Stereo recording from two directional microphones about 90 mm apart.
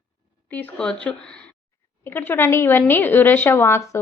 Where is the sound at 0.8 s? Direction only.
15° left (ahead or behind).